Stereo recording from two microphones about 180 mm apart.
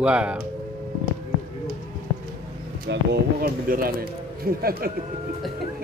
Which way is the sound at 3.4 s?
55° right (ahead or behind).